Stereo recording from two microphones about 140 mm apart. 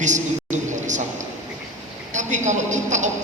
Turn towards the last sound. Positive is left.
turn(degrees=-60)  # may be behind; listen again after turning